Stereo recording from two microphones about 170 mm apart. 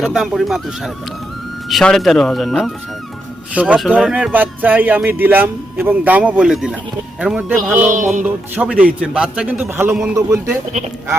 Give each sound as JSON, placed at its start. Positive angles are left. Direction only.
{"t": 0.0, "sound": "speech", "side_deg": 0}
{"t": 3.5, "sound": "a man's voice", "side_deg": -10}
{"t": 7.8, "sound": "music", "side_deg": -45}
{"t": 8.2, "sound": "a man's voice", "side_deg": -5}
{"t": 10.7, "sound": "speech", "side_deg": -40}